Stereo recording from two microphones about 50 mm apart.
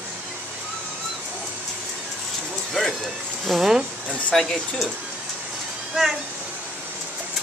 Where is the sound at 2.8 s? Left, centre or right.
Centre.